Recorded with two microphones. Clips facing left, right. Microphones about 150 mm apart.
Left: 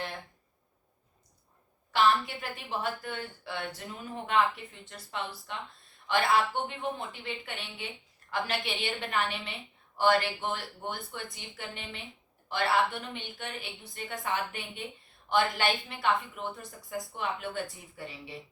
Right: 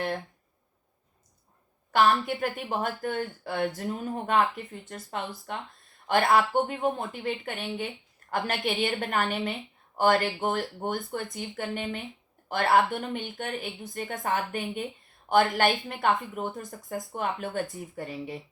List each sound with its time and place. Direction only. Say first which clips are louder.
1.9 s speech: right 3 dB; 50° right (ahead or behind)